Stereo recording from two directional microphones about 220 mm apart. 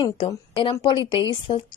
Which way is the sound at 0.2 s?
25° left (ahead or behind).